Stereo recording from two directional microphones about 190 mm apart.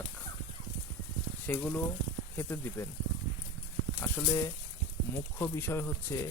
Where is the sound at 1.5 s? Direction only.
10° left (ahead or behind).